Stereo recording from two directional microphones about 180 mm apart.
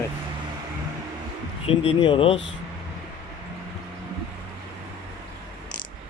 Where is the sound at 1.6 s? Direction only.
35° left (ahead or behind).